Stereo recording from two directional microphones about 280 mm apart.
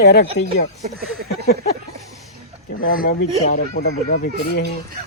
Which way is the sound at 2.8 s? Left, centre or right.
Left.